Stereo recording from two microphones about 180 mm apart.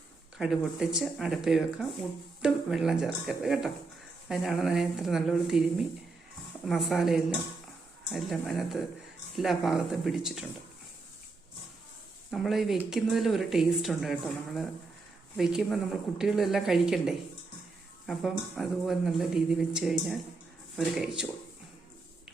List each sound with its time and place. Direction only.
0.3 s speech: 5° right (ahead or behind)
12.3 s speech: centre (ahead or behind)